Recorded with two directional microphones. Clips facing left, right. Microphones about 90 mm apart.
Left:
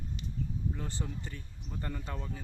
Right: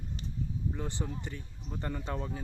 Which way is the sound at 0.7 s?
20° right (ahead or behind).